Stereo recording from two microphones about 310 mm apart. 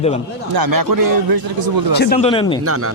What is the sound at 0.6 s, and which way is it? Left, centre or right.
A man's voice, right.